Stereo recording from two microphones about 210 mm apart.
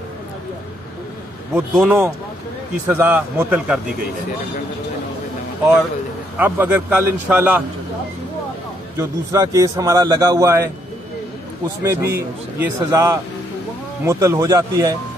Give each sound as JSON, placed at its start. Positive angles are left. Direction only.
{"t": 1.5, "sound": "a man's voice", "side_deg": -5}
{"t": 6.3, "sound": "a man's voice", "side_deg": -10}
{"t": 8.9, "sound": "a man's voice", "side_deg": -15}
{"t": 11.8, "sound": "a man's voice", "side_deg": -15}